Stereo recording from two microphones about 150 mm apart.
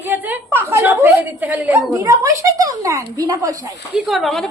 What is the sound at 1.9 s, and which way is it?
A woman's voice, 20° right (ahead or behind).